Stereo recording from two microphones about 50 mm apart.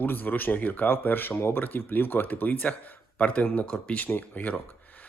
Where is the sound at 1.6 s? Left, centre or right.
Left.